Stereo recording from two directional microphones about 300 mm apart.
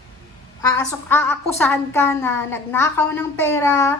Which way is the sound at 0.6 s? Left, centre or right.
Centre.